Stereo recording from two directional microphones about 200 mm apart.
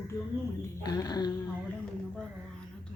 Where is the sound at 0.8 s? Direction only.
20° left (ahead or behind).